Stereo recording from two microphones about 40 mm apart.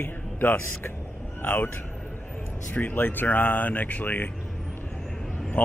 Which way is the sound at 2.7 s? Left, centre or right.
Left.